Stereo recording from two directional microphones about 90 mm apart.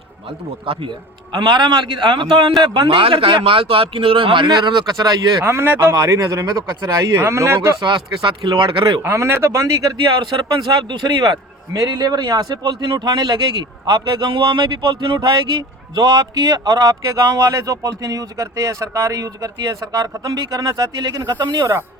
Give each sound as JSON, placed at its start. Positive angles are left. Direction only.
{"t": 0.3, "sound": "speech", "side_deg": -85}
{"t": 1.3, "sound": "a man's voice", "side_deg": -55}
{"t": 5.5, "sound": "a man's voice", "side_deg": -25}
{"t": 5.9, "sound": "speech", "side_deg": -40}
{"t": 7.2, "sound": "speech", "side_deg": -30}
{"t": 7.8, "sound": "a man's voice", "side_deg": -60}
{"t": 9.0, "sound": "speech", "side_deg": -30}
{"t": 10.2, "sound": "speech", "side_deg": -55}